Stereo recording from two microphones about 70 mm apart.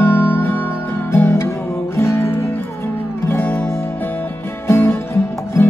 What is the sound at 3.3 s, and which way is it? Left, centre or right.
Music, left.